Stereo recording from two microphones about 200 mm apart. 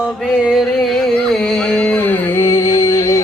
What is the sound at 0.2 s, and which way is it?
Music, centre (ahead or behind).